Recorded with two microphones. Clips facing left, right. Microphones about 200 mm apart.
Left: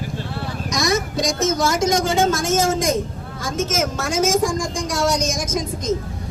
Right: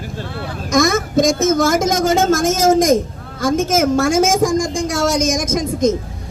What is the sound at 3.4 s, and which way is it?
A woman's voice, 50° right (ahead or behind).